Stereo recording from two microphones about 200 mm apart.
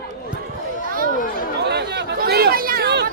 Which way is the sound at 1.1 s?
45° left (ahead or behind).